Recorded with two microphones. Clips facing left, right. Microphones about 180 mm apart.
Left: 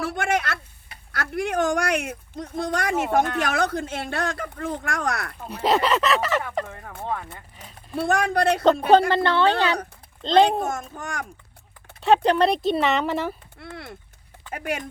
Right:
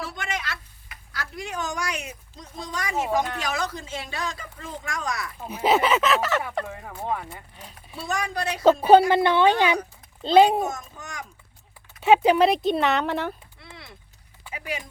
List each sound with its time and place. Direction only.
0.0 s speech: 60° left (ahead or behind)
5.4 s a woman's voice: 5° right (ahead or behind)
7.9 s speech: 55° left (ahead or behind)
8.6 s a woman's voice: 10° right (ahead or behind)
10.7 s a child's voice: 50° left (ahead or behind)
12.0 s speech: 5° right (ahead or behind)
13.6 s a child's voice: 55° left (ahead or behind)